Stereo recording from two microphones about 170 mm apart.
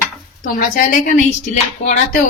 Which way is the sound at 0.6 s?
50° left (ahead or behind).